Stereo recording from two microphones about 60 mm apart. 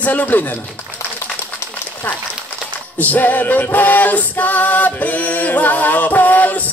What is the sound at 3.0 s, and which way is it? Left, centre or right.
Music, left.